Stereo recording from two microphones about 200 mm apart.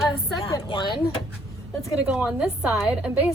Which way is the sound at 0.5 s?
25° left (ahead or behind).